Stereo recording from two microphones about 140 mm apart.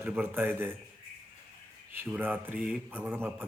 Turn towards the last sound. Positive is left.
turn(degrees=-15)  # may be behind; listen again after turning